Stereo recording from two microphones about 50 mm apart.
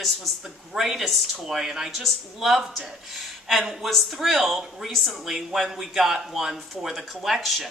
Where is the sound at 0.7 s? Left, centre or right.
Centre.